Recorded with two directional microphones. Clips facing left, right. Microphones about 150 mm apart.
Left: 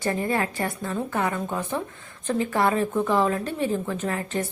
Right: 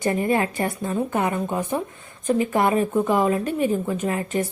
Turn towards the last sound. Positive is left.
turn(degrees=-15)  # may be behind; listen again after turning